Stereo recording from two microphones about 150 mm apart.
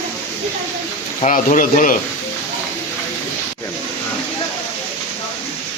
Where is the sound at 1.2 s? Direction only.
55° left (ahead or behind).